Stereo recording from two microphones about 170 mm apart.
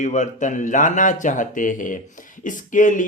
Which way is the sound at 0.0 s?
45° left (ahead or behind).